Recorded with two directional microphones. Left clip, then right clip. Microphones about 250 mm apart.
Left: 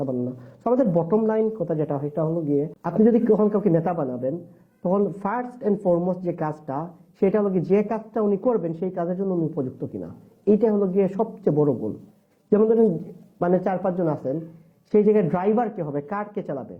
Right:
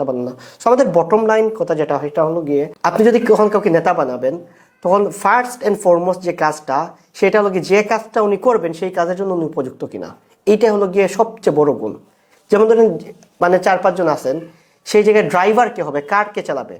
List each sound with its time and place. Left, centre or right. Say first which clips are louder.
0.0 s speech: right 8 dB; right
9.9 s speech: right 7 dB; centre
11.5 s speech: right 8 dB; right
14.8 s speech: right 7 dB; centre